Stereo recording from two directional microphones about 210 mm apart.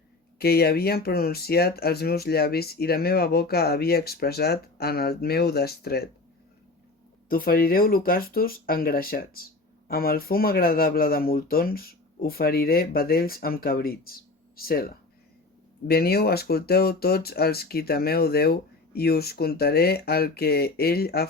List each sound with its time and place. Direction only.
0.3 s speech: 50° left (ahead or behind)
7.3 s speech: 45° left (ahead or behind)